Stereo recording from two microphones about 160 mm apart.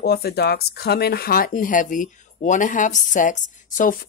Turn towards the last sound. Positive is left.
turn(degrees=55)  # may be behind; listen again after turning